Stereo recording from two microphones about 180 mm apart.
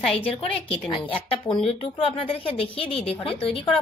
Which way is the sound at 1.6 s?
30° left (ahead or behind).